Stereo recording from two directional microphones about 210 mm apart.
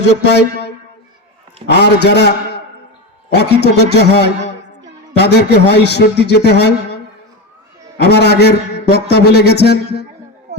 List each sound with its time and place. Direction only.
0.2 s a man's voice: 55° left (ahead or behind)
8.0 s a man's voice: 50° left (ahead or behind)